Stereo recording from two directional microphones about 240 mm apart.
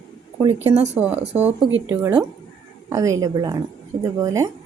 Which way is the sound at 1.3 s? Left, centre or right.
Centre.